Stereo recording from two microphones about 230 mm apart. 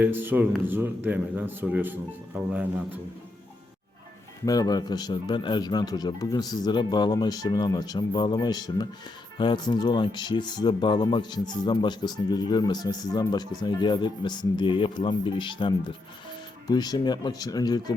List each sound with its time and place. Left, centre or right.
0.0 s speech: centre
4.4 s speech: centre